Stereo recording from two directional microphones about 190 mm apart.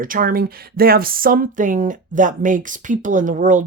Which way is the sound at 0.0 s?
50° right (ahead or behind).